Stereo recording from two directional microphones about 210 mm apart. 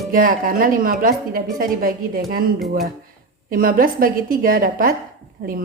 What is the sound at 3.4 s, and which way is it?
A woman's voice, 45° right (ahead or behind).